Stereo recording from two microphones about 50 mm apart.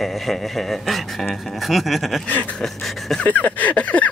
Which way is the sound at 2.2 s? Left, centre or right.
Left.